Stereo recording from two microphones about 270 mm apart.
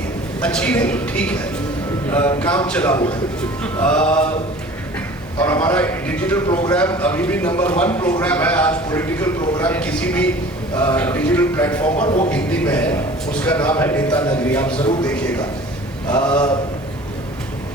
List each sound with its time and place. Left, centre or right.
0.4 s a man's voice: centre
5.4 s a man's voice: centre
12.0 s a man's voice: left
12.3 s a man's voice: centre